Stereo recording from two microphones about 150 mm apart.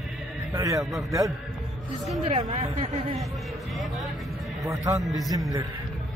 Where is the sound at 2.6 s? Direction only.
40° right (ahead or behind).